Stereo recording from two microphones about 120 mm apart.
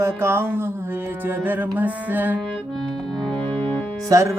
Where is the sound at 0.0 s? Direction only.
20° right (ahead or behind).